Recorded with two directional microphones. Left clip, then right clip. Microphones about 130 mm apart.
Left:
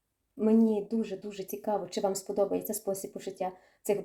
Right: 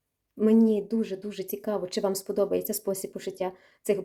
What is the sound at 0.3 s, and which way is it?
Speech, 40° right (ahead or behind).